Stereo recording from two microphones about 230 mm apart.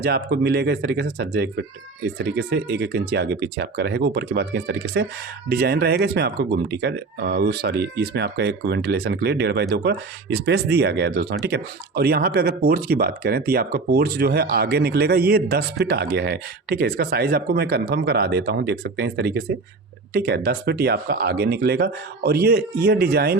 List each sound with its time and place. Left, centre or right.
0.0 s speech: right